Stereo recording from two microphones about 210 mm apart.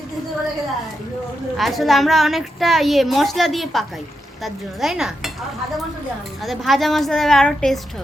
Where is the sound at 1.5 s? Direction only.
Centre (ahead or behind).